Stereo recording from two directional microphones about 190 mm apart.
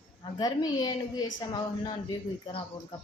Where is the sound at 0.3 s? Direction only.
20° left (ahead or behind).